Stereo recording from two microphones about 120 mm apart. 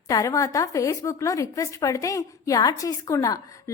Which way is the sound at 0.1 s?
30° left (ahead or behind).